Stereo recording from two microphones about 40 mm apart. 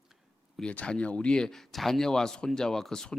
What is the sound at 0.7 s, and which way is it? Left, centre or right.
Speech, left.